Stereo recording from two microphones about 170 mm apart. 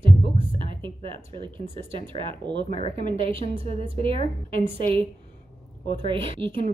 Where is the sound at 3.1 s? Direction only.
35° right (ahead or behind).